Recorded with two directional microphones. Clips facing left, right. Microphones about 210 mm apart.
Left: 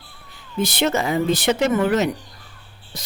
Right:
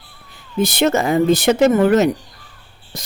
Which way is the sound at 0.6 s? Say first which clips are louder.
Right 4 dB; 45° right (ahead or behind).